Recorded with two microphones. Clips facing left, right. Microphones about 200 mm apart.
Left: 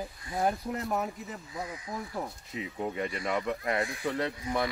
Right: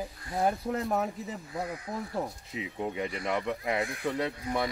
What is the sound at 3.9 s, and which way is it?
Speech, centre (ahead or behind).